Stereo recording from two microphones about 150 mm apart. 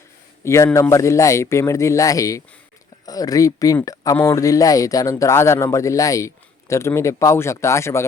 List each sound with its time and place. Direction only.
0.4 s speech: 20° left (ahead or behind)